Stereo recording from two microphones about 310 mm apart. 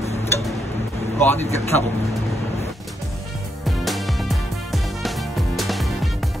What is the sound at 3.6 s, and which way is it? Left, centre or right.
Music, centre.